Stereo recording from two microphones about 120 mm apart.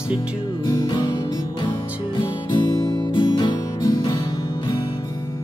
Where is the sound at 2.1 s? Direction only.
40° left (ahead or behind).